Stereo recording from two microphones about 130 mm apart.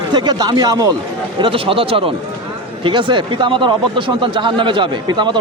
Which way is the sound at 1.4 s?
45° right (ahead or behind).